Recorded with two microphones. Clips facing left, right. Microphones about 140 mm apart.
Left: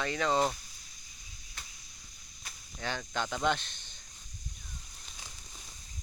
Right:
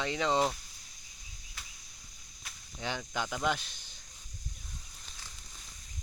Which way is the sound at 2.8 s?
15° right (ahead or behind).